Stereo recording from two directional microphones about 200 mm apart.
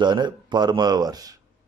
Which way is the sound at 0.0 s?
20° right (ahead or behind).